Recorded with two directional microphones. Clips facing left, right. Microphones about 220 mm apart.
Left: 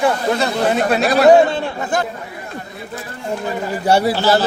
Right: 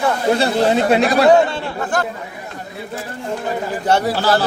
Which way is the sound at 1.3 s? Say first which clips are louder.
Left 2 dB; 10° left (ahead or behind).